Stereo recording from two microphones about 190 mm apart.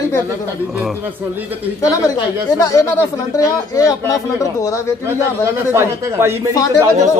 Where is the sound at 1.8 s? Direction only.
20° left (ahead or behind).